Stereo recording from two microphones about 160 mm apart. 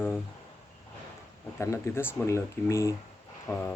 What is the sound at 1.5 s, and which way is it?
Speech, 15° left (ahead or behind).